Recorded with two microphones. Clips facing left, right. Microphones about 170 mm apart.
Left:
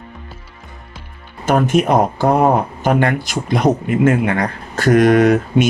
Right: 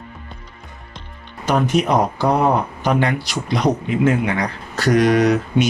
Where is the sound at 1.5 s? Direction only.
50° left (ahead or behind).